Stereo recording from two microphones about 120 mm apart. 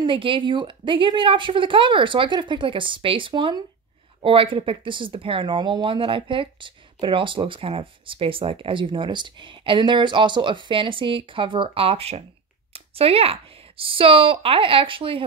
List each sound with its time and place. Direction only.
0.0 s speech: 45° right (ahead or behind)